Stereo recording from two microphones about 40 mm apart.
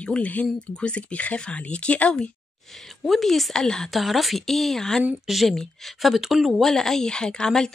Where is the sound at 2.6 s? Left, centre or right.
Centre.